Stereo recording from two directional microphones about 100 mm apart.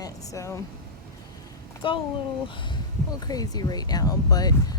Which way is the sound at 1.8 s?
60° left (ahead or behind).